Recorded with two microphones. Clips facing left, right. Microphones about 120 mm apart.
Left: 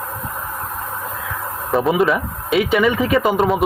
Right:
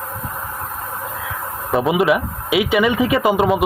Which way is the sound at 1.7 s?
Centre (ahead or behind).